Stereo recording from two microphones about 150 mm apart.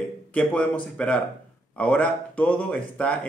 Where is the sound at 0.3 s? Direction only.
10° left (ahead or behind).